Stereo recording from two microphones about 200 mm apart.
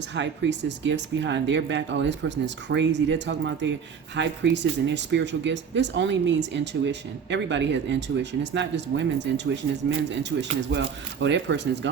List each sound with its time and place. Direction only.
0.2 s speech: 65° right (ahead or behind)